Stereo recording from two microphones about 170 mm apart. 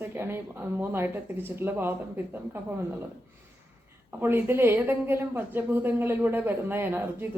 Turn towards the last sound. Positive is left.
turn(degrees=-15)  # may be behind; listen again after turning